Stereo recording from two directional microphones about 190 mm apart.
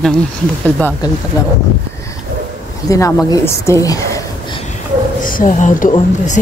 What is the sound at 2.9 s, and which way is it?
A woman's voice, 15° left (ahead or behind).